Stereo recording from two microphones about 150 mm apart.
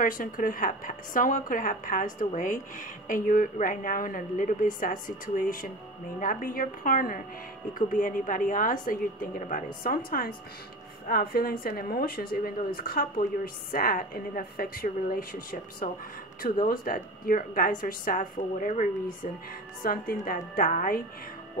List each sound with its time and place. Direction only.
0.0 s speech: 65° left (ahead or behind)
16.4 s speech: 75° left (ahead or behind)
19.8 s speech: 70° left (ahead or behind)